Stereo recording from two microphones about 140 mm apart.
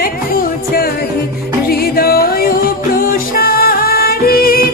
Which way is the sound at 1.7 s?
90° left.